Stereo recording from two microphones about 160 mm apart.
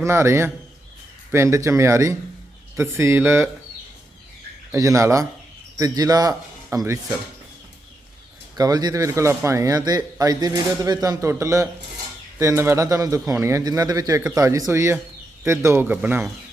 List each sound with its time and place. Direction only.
0.0 s speech: 15° right (ahead or behind)
4.7 s a man's voice: 20° right (ahead or behind)
8.5 s a man's voice: 25° right (ahead or behind)